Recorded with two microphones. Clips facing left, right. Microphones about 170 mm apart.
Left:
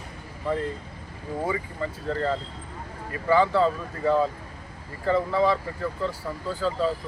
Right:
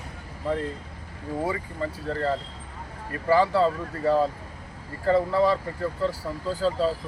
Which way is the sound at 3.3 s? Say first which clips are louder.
Even; 35° right (ahead or behind).